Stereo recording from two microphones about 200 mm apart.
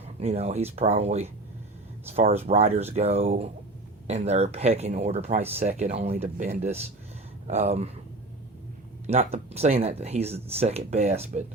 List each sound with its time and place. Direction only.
0.0 s speech: 30° right (ahead or behind)
9.0 s speech: 30° right (ahead or behind)